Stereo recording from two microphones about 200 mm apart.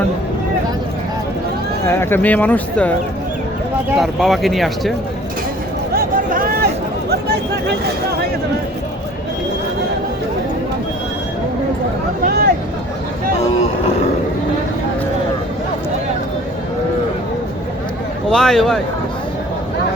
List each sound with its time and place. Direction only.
1.9 s speech: 10° left (ahead or behind)
3.9 s speech: centre (ahead or behind)
5.9 s a sound: 45° right (ahead or behind)
7.1 s chatter: 55° right (ahead or behind)
12.2 s speech: 50° right (ahead or behind)
18.3 s speech: 5° left (ahead or behind)